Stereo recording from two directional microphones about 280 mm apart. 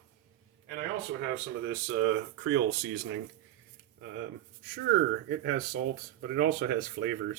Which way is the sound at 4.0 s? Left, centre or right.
Right.